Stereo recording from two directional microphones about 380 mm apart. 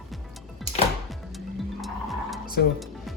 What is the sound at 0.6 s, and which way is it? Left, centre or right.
Music, centre.